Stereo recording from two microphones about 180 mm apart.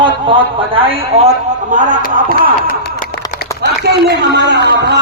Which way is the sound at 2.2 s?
50° right (ahead or behind).